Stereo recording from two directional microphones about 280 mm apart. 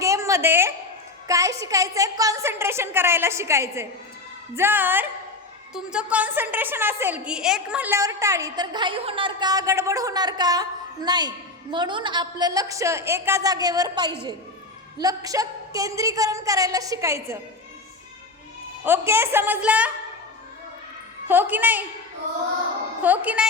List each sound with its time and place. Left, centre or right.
0.0 s a sound: centre
1.3 s a woman's voice: centre
18.9 s a woman's voice: centre
21.2 s a woman's voice: centre
23.0 s a woman's voice: centre